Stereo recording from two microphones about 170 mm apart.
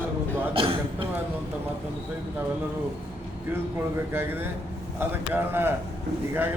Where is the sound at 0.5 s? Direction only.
30° right (ahead or behind).